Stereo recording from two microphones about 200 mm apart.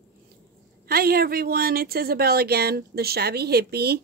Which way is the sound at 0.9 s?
50° right (ahead or behind).